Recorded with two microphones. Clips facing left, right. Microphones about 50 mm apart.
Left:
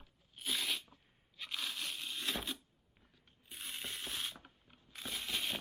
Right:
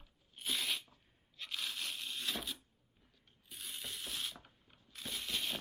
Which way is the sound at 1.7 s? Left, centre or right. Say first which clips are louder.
Even; centre.